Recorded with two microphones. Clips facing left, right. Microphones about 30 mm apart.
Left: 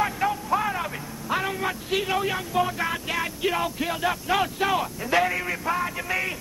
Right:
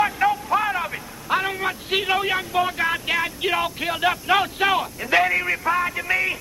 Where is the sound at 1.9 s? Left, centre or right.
Right.